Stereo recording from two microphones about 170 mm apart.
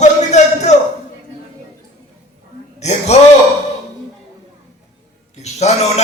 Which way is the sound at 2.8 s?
40° left (ahead or behind).